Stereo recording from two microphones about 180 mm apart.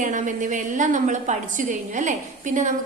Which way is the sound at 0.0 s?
45° right (ahead or behind).